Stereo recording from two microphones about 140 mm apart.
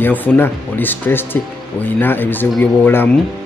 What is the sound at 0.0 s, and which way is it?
Speech, 15° left (ahead or behind).